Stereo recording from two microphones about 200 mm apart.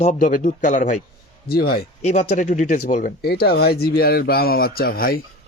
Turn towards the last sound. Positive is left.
turn(degrees=50)  # may be behind; listen again after turning